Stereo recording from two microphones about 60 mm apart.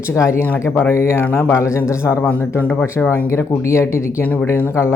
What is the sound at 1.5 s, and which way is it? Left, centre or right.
Speech, left.